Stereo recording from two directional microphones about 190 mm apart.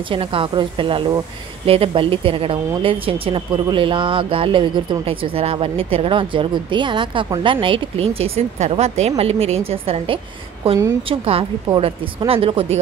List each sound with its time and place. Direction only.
0.1 s a woman's voice: 30° right (ahead or behind)